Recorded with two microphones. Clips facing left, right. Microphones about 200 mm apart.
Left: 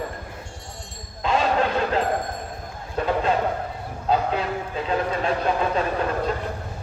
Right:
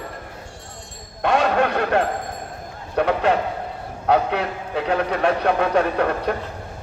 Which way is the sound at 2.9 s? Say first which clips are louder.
Right 3 dB; 70° right (ahead or behind).